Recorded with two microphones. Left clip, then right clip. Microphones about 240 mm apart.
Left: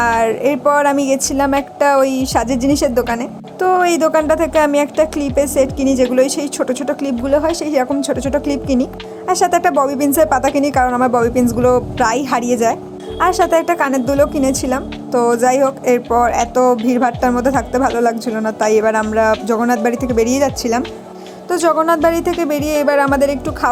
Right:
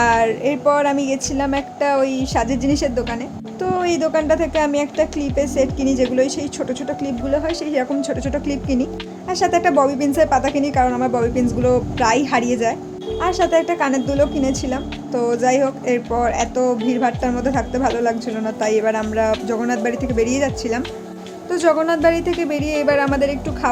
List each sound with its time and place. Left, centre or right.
0.2 s speech: centre